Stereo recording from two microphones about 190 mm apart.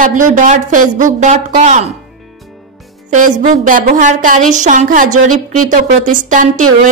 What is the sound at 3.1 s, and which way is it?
A woman's voice, 45° right (ahead or behind).